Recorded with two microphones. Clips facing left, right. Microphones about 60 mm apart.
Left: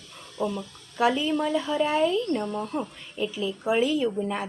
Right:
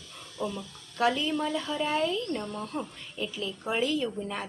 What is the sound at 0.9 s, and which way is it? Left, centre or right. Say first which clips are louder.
Speech: left 3 dB; centre.